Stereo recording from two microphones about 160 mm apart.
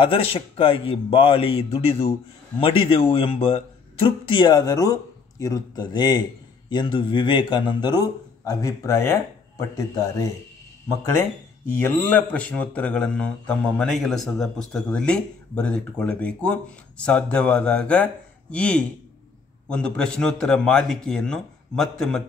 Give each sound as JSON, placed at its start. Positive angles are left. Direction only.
{"t": 0.0, "sound": "a man's voice", "side_deg": 35}
{"t": 11.8, "sound": "a man's voice", "side_deg": 10}